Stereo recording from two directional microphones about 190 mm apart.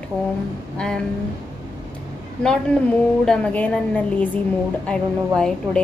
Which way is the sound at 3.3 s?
5° left (ahead or behind).